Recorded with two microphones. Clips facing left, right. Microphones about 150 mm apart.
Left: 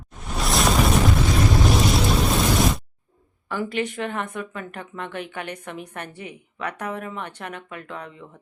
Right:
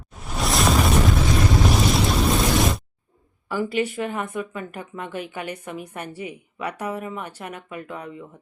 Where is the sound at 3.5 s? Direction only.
5° right (ahead or behind).